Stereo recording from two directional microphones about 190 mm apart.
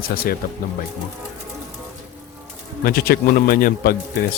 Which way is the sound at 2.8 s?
50° left (ahead or behind).